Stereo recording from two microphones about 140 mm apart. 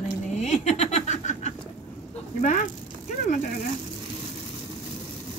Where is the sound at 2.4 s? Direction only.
65° left (ahead or behind).